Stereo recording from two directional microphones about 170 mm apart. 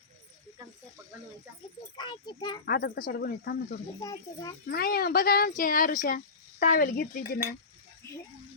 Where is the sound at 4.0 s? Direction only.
20° left (ahead or behind).